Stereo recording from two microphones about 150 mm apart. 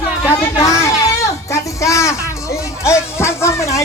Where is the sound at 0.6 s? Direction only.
20° left (ahead or behind).